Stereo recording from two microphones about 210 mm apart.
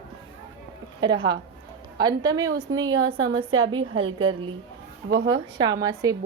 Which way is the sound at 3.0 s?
70° right (ahead or behind).